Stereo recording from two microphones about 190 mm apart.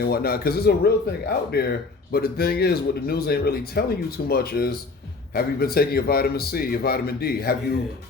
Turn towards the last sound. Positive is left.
turn(degrees=55)  # may be behind; listen again after turning